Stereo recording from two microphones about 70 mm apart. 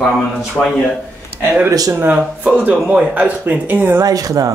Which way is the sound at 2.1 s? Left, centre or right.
Centre.